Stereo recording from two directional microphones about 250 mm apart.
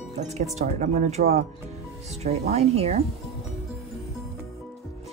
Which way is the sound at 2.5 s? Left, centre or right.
Right.